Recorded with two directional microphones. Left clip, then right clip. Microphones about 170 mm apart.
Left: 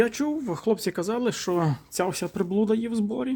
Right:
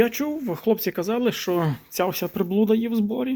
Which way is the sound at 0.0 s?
5° left (ahead or behind).